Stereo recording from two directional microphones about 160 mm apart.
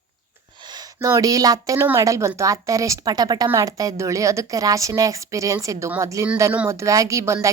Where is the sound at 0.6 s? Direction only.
25° right (ahead or behind).